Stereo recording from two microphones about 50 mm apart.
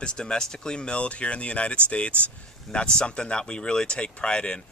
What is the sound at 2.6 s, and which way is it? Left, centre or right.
Speech, centre.